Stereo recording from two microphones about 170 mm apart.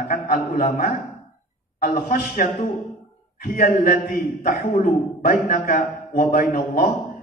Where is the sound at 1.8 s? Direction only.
60° left (ahead or behind).